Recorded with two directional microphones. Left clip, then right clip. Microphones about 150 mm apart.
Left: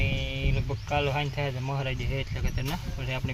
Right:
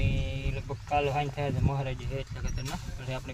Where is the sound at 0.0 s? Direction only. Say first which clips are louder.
Left 5 dB; 5° right (ahead or behind).